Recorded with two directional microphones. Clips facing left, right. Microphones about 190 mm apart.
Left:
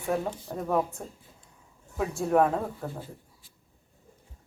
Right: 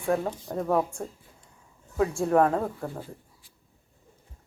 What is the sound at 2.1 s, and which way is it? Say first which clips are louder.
Speech: even; 5° left (ahead or behind).